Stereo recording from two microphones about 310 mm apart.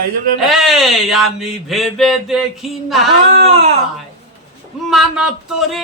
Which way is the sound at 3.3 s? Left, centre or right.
Centre.